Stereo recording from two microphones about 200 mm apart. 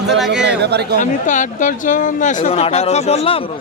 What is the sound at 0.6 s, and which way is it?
Speech, 55° right (ahead or behind).